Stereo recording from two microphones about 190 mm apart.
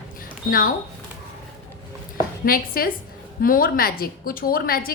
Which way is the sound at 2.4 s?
50° left (ahead or behind).